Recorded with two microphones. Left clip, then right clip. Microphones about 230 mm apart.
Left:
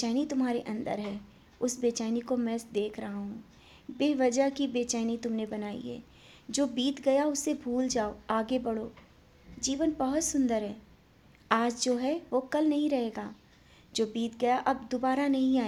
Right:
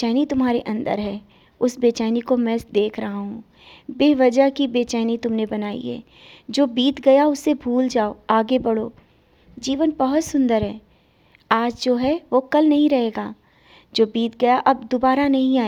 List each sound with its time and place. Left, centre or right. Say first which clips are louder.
0.0 s a woman's voice: right 10 dB; right